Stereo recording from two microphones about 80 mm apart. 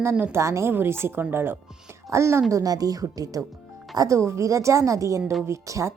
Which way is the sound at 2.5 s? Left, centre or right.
Right.